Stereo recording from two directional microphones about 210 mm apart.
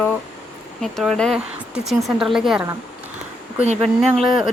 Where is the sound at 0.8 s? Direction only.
Centre (ahead or behind).